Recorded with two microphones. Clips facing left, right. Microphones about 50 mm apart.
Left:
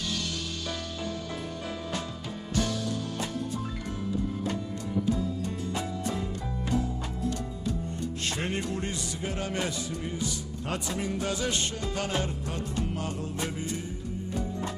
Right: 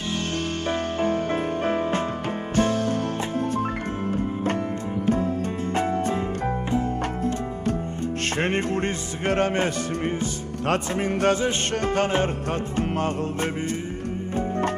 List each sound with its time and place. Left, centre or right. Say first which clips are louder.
0.7 s music: right 13 dB; right
10.7 s music: right 8 dB; right